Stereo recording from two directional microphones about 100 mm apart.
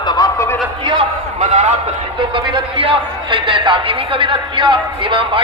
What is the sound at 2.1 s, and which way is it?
A man's voice, 55° right (ahead or behind).